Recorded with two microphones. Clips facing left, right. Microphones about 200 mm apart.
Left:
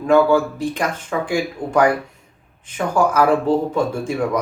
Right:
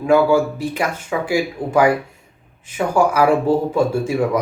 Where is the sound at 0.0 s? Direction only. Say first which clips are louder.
Even; 10° right (ahead or behind).